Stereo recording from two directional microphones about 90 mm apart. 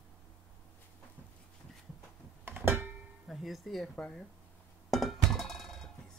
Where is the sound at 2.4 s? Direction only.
25° right (ahead or behind).